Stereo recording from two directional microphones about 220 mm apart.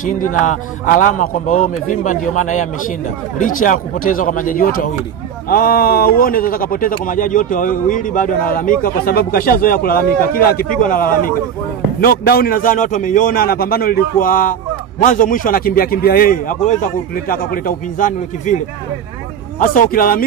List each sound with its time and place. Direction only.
0.0 s a man's voice: 35° left (ahead or behind)
19.6 s a man's voice: 40° left (ahead or behind)